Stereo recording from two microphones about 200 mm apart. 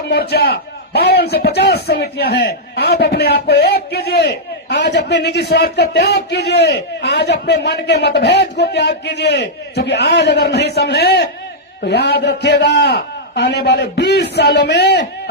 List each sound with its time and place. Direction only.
0.1 s a man's voice: 55° left (ahead or behind)